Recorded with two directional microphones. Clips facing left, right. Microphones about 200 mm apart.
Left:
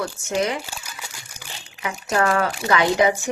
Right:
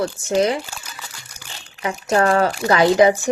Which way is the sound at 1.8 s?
35° right (ahead or behind).